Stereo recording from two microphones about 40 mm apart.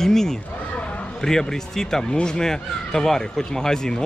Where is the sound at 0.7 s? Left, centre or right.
Left.